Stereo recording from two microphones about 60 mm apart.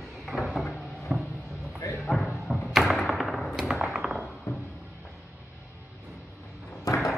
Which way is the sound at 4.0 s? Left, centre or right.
Centre.